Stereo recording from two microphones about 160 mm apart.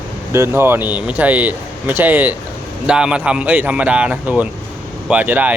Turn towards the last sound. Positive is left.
turn(degrees=-10)  # may be behind; listen again after turning